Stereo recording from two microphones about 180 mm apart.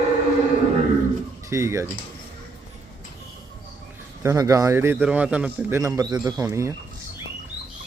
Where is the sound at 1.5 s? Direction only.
15° right (ahead or behind).